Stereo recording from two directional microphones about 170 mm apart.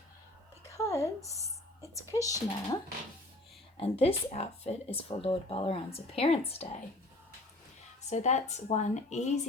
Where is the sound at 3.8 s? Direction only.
35° left (ahead or behind).